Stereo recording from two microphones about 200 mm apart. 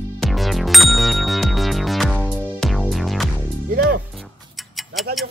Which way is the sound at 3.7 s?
50° right (ahead or behind).